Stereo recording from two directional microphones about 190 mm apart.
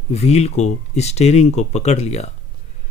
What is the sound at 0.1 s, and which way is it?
A man's voice, 35° left (ahead or behind).